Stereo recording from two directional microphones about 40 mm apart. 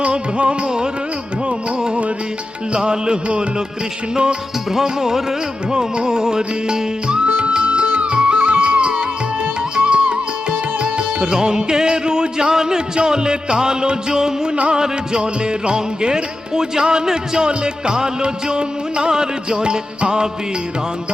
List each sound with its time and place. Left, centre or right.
0.0 s music: right
14.5 s music: right